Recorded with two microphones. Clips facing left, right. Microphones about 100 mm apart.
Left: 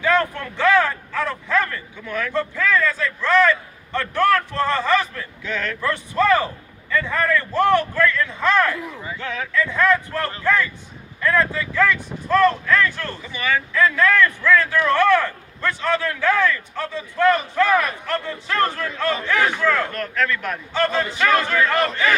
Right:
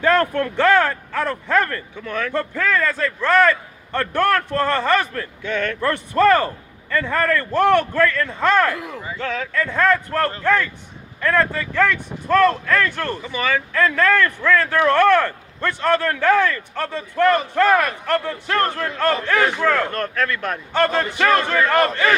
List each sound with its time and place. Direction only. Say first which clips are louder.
0.0 s a man's voice: right 3 dB; 50° right (ahead or behind)
8.7 s speech: right 1 dB; 85° right
9.5 s a man's voice: even; 50° right (ahead or behind)
21.2 s a man's voice: right 1 dB; 40° right (ahead or behind)